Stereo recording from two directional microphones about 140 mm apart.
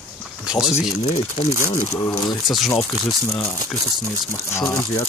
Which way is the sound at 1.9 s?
25° left (ahead or behind).